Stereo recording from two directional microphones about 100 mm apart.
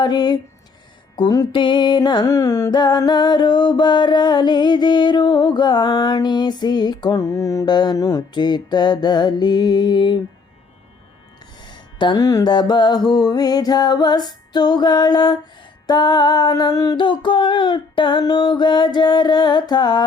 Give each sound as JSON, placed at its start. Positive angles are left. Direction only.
{"t": 0.0, "sound": "music", "side_deg": 45}
{"t": 1.5, "sound": "music", "side_deg": 50}
{"t": 7.2, "sound": "music", "side_deg": 30}
{"t": 7.6, "sound": "music", "side_deg": 45}
{"t": 8.3, "sound": "music", "side_deg": 50}
{"t": 11.6, "sound": "music", "side_deg": 50}
{"t": 17.0, "sound": "music", "side_deg": 55}